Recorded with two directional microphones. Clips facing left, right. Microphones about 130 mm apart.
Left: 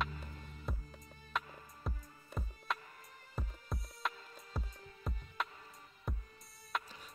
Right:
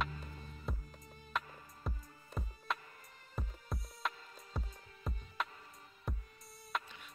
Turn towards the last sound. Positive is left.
turn(degrees=0)  # may be behind; listen again after turning